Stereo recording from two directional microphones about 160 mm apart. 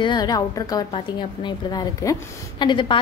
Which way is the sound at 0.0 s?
25° left (ahead or behind).